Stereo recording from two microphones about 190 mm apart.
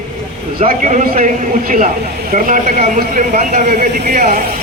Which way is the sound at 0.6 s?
40° right (ahead or behind).